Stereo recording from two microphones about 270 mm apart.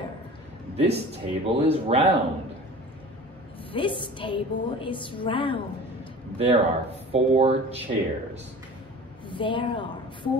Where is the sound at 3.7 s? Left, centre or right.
Centre.